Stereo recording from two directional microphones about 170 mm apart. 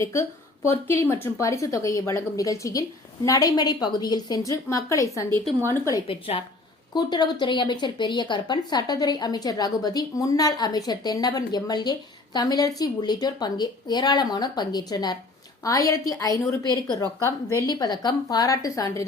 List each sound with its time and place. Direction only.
0.0 s a woman's voice: 15° left (ahead or behind)
6.1 s a woman's voice: 30° left (ahead or behind)